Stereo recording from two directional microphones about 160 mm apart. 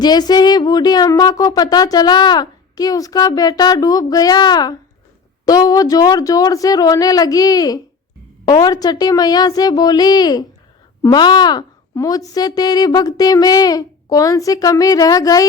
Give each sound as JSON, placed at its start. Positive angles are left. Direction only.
{"t": 0.0, "sound": "speech", "side_deg": 25}